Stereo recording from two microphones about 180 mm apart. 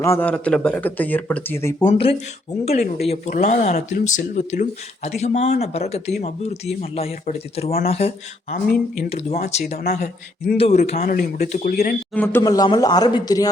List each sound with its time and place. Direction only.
0.0 s speech: 10° left (ahead or behind)
1.9 s speech: 35° left (ahead or behind)
11.0 s speech: 50° left (ahead or behind)
12.1 s speech: 10° left (ahead or behind)
12.4 s a man's voice: 20° left (ahead or behind)